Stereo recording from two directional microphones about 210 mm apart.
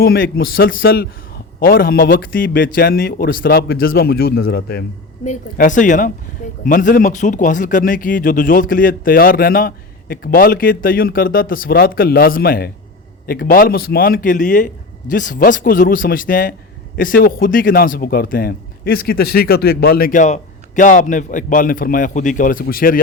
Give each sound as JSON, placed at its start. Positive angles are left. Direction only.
{"t": 0.0, "sound": "speech", "side_deg": 45}
{"t": 5.2, "sound": "speech", "side_deg": 35}